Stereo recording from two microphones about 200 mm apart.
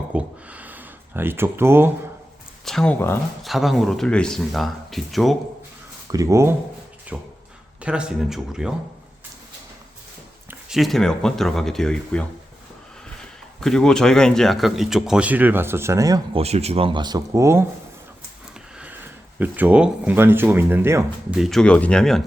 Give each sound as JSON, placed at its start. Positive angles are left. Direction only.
{"t": 0.1, "sound": "a sound", "side_deg": -5}
{"t": 2.6, "sound": "speech", "side_deg": 5}
{"t": 3.4, "sound": "speech", "side_deg": 0}
{"t": 6.1, "sound": "speech", "side_deg": -15}
{"t": 10.5, "sound": "speech", "side_deg": 0}
{"t": 13.6, "sound": "speech", "side_deg": 0}
{"t": 16.4, "sound": "speech", "side_deg": -30}
{"t": 19.4, "sound": "speech", "side_deg": -10}